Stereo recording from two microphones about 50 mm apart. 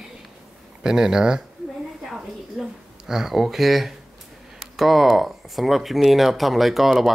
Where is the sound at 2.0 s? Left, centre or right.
Centre.